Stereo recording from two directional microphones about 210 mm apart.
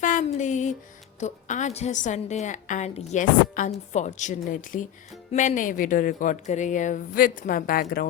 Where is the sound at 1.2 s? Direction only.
35° left (ahead or behind).